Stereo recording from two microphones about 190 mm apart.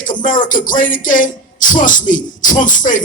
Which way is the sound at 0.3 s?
45° left (ahead or behind).